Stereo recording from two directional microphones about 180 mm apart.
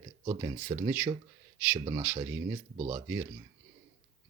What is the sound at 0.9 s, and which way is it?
Speech, 10° right (ahead or behind).